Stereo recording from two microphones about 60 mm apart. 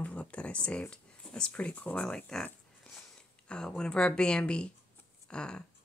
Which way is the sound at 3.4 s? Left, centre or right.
Centre.